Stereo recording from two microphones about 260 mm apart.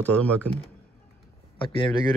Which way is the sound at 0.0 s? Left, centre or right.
Centre.